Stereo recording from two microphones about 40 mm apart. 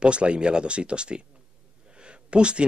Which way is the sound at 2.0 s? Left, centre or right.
Right.